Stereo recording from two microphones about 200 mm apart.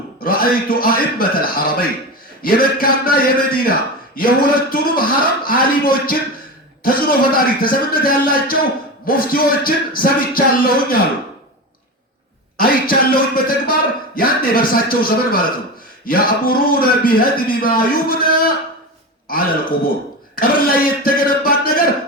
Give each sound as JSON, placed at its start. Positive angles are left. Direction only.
{"t": 0.2, "sound": "a man's voice", "side_deg": 45}
{"t": 12.5, "sound": "a man's voice", "side_deg": 45}
{"t": 20.3, "sound": "speech", "side_deg": 45}